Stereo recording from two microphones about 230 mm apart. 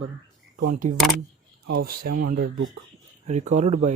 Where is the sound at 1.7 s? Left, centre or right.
Right.